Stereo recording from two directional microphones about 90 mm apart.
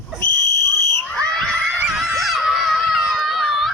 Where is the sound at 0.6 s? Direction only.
30° left (ahead or behind).